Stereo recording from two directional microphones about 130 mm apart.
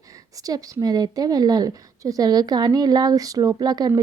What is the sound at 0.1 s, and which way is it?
A woman's voice, 25° right (ahead or behind).